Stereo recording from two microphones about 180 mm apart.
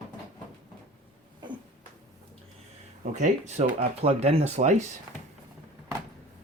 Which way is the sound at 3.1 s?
40° right (ahead or behind).